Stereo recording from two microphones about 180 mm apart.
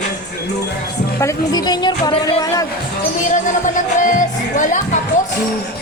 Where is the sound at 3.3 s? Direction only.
45° left (ahead or behind).